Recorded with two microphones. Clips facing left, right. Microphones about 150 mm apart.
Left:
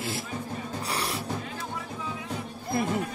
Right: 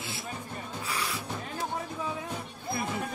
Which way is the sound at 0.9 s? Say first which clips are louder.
Left 3 dB; 35° left (ahead or behind).